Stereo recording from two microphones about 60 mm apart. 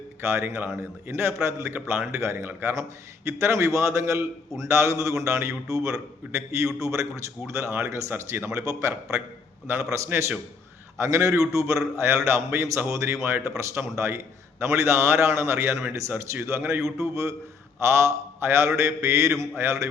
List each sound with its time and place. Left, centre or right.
0.2 s a man's voice: right
9.6 s a man's voice: right
16.3 s a man's voice: right